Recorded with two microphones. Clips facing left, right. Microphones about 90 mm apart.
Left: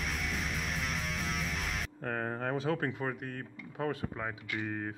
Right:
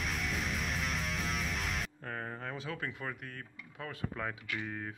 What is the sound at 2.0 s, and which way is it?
Speech, 40° left (ahead or behind).